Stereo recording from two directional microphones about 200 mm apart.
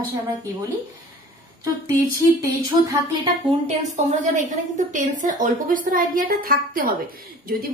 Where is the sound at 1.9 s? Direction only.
15° right (ahead or behind).